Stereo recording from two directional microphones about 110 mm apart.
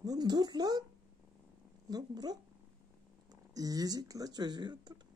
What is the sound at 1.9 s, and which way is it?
Speech, 35° right (ahead or behind).